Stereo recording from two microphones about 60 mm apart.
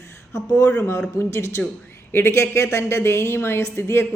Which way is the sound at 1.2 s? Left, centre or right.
Left.